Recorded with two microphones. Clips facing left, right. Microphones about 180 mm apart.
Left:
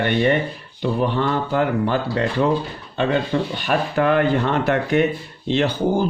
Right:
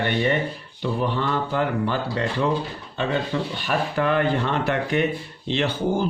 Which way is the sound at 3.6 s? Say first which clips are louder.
Left 3 dB; 55° left (ahead or behind).